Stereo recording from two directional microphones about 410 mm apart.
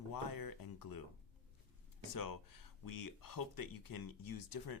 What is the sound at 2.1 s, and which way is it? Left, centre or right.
Speech, left.